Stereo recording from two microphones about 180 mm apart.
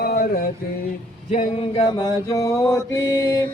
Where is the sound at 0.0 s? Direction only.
55° left (ahead or behind).